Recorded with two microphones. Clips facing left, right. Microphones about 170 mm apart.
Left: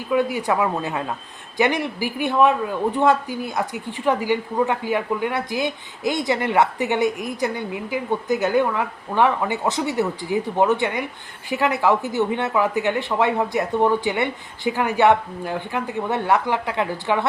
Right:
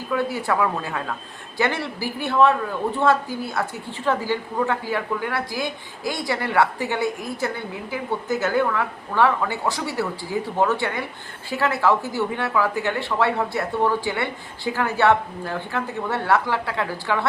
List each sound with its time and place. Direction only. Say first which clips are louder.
0.1 s speech: left 3 dB; 15° left (ahead or behind)